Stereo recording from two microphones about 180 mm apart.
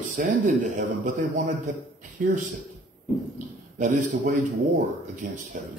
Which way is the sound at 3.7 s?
45° right (ahead or behind).